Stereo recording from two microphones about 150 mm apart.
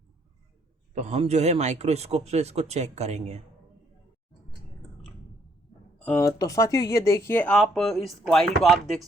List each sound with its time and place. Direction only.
0.9 s speech: 45° right (ahead or behind)
6.1 s speech: 20° left (ahead or behind); by 9.0 s centre (ahead or behind)